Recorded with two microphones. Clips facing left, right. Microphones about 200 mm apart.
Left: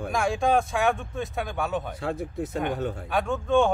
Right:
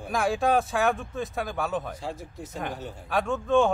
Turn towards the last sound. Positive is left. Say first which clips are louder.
# even
turn(degrees=0)  # may be behind; listen again after turning